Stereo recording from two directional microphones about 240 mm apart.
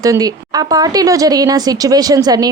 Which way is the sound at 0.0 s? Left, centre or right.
Centre.